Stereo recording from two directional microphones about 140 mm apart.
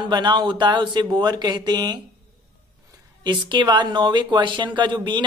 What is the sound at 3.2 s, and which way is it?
Speech, 35° right (ahead or behind).